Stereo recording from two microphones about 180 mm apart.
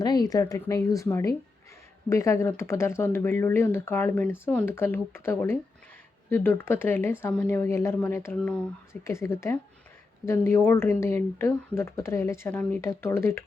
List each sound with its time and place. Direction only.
0.0 s speech: 20° left (ahead or behind)